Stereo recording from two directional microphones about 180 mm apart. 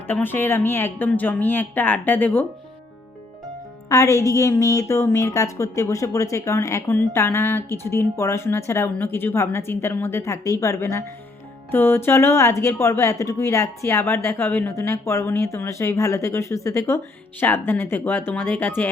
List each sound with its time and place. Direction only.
0.1 s a woman's voice: 10° left (ahead or behind)
3.8 s a woman's voice: 15° left (ahead or behind)